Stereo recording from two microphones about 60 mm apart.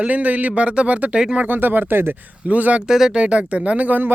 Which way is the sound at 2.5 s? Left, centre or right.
Right.